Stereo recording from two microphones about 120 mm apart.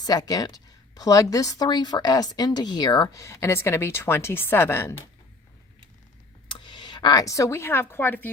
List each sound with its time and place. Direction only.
0.0 s speech: 35° left (ahead or behind)
3.2 s a woman's voice: 25° left (ahead or behind)
6.5 s speech: 40° left (ahead or behind); by 8.3 s 15° left (ahead or behind)